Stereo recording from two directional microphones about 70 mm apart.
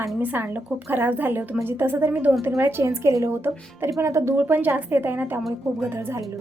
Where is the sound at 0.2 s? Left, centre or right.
Right.